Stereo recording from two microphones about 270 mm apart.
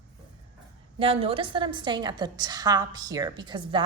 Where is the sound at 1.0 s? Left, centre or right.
Right.